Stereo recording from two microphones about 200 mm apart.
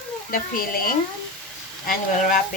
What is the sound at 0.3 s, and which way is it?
Speech, 45° left (ahead or behind).